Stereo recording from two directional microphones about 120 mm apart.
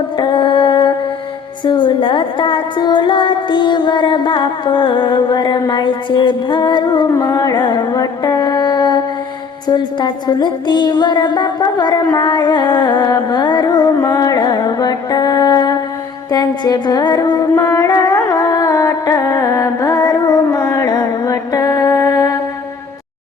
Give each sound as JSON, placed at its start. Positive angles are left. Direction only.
{"t": 0.2, "sound": "music", "side_deg": 40}
{"t": 7.1, "sound": "music", "side_deg": 25}